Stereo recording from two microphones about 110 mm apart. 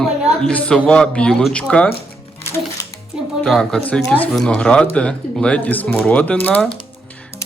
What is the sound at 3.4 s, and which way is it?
Speech, 5° left (ahead or behind).